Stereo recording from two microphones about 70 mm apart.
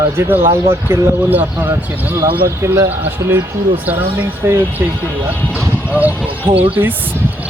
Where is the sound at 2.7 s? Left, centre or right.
Right.